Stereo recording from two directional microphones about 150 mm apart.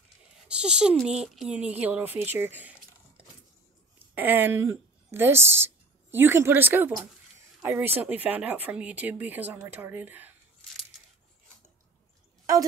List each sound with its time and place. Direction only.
0.5 s speech: 5° right (ahead or behind)
4.1 s speech: 15° right (ahead or behind)